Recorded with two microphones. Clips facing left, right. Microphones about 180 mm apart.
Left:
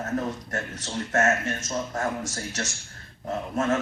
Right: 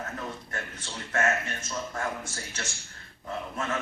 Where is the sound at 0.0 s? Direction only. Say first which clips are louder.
Left 8 dB; 45° left (ahead or behind).